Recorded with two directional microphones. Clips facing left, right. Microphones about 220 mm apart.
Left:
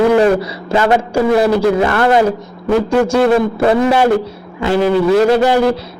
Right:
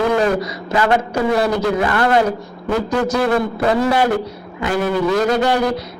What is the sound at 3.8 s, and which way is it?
A man's voice, 25° left (ahead or behind).